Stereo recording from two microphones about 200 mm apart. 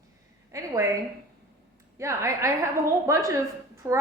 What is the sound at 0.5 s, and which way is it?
Speech, 15° right (ahead or behind).